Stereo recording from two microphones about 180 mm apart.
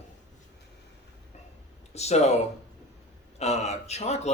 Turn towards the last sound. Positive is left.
turn(degrees=35)  # may be behind; listen again after turning